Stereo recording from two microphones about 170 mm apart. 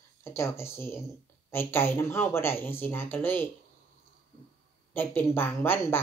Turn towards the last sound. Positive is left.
turn(degrees=15)  # may be behind; listen again after turning